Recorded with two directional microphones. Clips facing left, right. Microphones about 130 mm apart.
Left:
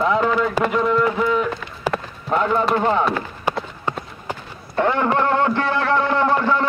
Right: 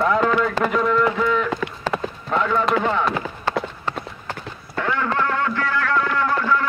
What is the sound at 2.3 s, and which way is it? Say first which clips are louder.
Speech: left 2 dB; 25° left (ahead or behind).